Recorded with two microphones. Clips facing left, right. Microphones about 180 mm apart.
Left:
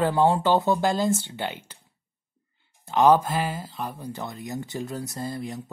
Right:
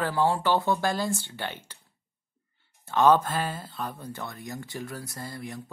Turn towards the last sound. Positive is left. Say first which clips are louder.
# left 6 dB
turn(degrees=20)  # may be behind; listen again after turning